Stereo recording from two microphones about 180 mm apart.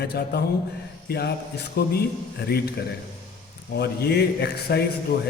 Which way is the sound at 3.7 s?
65° left (ahead or behind).